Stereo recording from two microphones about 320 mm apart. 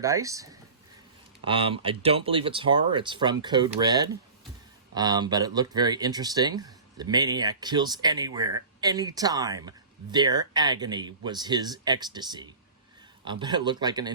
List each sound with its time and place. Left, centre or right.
0.0 s speech: centre